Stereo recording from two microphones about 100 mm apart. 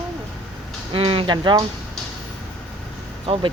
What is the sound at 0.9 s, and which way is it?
Speech, 65° right (ahead or behind).